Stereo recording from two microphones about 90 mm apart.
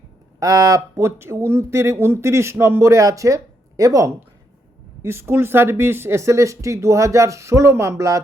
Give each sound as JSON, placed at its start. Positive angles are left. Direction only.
{"t": 0.3, "sound": "speech", "side_deg": -40}
{"t": 5.0, "sound": "speech", "side_deg": -25}